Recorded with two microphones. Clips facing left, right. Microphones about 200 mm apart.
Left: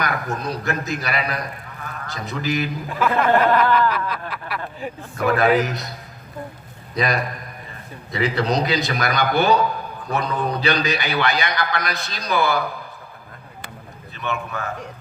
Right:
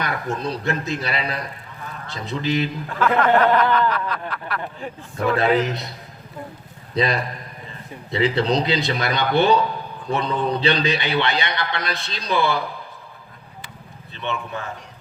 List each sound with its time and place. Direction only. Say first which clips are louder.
0.0 s a man's voice: even; 30° right (ahead or behind)
3.2 s a sound: even; 5° left (ahead or behind)
5.1 s a man's voice: left 1 dB; 30° right (ahead or behind)
6.9 s a man's voice: right 1 dB; 30° right (ahead or behind)
14.2 s a man's voice: left 1 dB; 30° right (ahead or behind)